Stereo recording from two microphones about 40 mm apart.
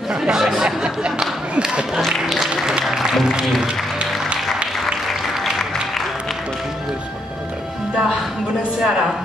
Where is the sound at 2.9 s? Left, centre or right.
Centre.